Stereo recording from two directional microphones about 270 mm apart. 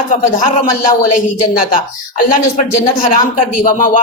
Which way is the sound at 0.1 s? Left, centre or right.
Left.